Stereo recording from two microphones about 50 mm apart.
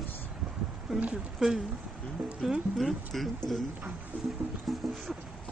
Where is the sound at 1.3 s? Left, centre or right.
Centre.